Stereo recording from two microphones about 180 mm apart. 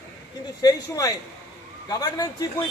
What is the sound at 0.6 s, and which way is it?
A man's voice, 20° left (ahead or behind).